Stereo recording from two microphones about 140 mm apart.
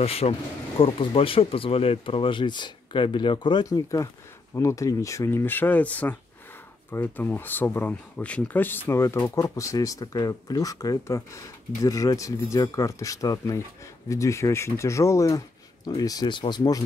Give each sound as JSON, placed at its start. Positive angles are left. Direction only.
{"t": 0.0, "sound": "speech", "side_deg": 45}